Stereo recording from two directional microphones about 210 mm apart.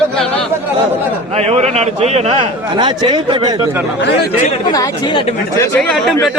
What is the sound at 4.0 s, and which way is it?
Speech, 55° left (ahead or behind).